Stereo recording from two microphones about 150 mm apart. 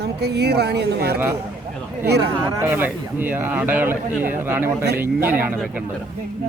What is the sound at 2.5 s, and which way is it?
A man's voice, 15° right (ahead or behind).